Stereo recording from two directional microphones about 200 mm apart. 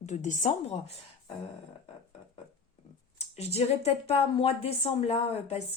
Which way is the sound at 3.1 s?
30° left (ahead or behind).